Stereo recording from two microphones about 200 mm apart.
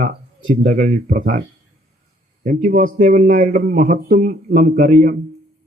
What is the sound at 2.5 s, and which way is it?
Speech, 45° right (ahead or behind).